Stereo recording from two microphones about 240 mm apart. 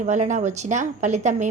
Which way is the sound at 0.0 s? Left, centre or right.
Right.